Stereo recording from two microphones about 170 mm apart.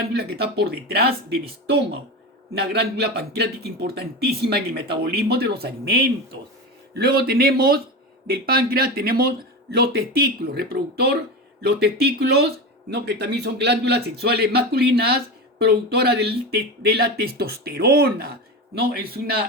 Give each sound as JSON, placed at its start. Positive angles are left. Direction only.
{"t": 0.1, "sound": "speech", "side_deg": -70}